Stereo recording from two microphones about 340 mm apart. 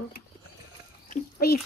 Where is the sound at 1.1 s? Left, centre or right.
Left.